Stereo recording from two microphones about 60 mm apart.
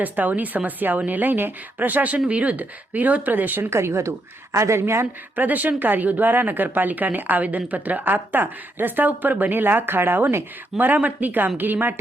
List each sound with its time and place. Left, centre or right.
0.0 s a woman's voice: right
5.4 s a woman's voice: right